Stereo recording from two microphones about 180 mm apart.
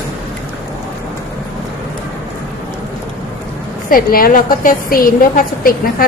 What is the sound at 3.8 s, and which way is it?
A woman's voice, 55° left (ahead or behind).